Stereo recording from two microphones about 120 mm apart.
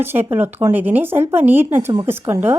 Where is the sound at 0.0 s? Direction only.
20° right (ahead or behind).